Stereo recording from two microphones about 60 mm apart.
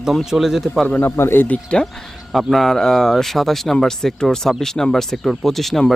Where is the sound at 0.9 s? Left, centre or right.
Left.